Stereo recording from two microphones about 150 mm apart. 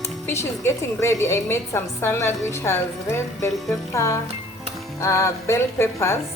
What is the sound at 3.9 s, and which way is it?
Speech, 20° left (ahead or behind).